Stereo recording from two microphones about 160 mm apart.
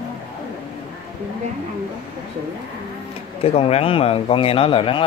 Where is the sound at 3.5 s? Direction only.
40° left (ahead or behind).